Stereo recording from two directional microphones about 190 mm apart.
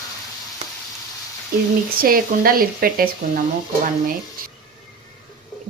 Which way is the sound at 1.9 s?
50° right (ahead or behind).